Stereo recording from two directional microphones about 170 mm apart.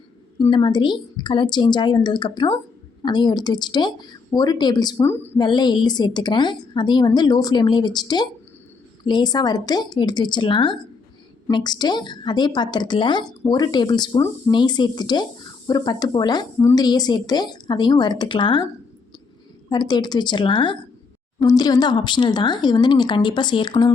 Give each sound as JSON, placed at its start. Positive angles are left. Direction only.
{"t": 0.5, "sound": "a woman's voice", "side_deg": 25}
{"t": 5.4, "sound": "a woman's voice", "side_deg": 25}
{"t": 19.7, "sound": "a woman's voice", "side_deg": 25}